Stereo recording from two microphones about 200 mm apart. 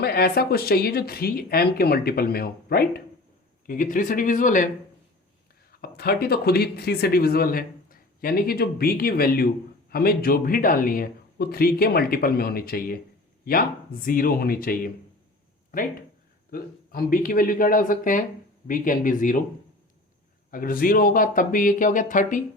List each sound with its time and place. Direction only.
0.0 s speech: 50° left (ahead or behind)
5.8 s speech: 50° left (ahead or behind)
20.5 s speech: 45° left (ahead or behind)